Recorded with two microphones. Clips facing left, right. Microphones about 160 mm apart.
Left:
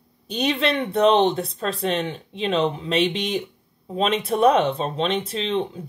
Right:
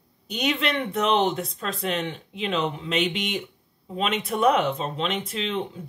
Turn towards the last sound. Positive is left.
turn(degrees=30)  # may be behind; listen again after turning